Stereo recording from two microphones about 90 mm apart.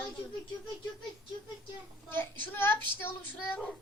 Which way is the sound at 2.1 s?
25° left (ahead or behind).